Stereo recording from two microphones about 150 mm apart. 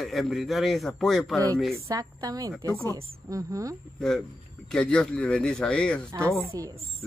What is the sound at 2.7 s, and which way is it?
Speech, 20° left (ahead or behind).